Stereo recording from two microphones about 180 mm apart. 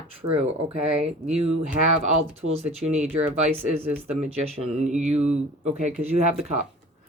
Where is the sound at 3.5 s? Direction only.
10° right (ahead or behind).